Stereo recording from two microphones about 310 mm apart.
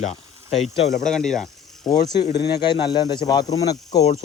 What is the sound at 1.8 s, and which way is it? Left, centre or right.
Speech, centre.